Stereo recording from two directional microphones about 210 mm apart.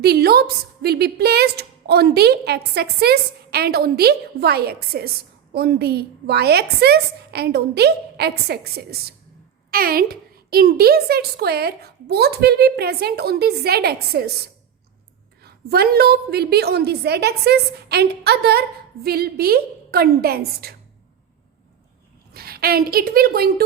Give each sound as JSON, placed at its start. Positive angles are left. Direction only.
{"t": 0.0, "sound": "a woman's voice", "side_deg": -50}
{"t": 15.4, "sound": "a woman's voice", "side_deg": -50}
{"t": 22.3, "sound": "a woman's voice", "side_deg": -45}